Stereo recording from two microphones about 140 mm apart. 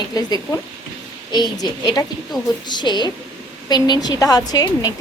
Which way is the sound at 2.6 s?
30° left (ahead or behind).